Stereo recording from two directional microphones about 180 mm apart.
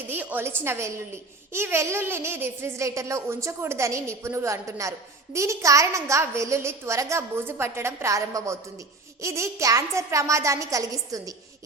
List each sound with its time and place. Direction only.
0.1 s a child's voice: 10° right (ahead or behind)